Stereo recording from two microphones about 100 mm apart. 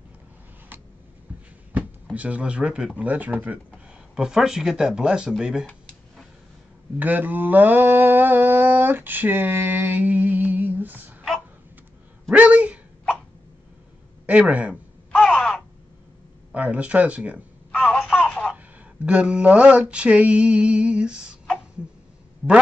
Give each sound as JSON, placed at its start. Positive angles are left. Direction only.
{"t": 0.7, "sound": "a sound", "side_deg": -20}
{"t": 2.1, "sound": "mantra", "side_deg": -15}
{"t": 4.1, "sound": "speech", "side_deg": -5}
{"t": 5.4, "sound": "mantra", "side_deg": -5}
{"t": 7.0, "sound": "a sound", "side_deg": -15}
{"t": 12.3, "sound": "a sound", "side_deg": -15}
{"t": 14.5, "sound": "mantra", "side_deg": -15}
{"t": 15.1, "sound": "caw", "side_deg": 5}
{"t": 16.5, "sound": "mantra", "side_deg": -15}
{"t": 17.6, "sound": "telephone", "side_deg": 15}
{"t": 17.9, "sound": "telephone", "side_deg": 0}
{"t": 19.0, "sound": "mantra", "side_deg": -10}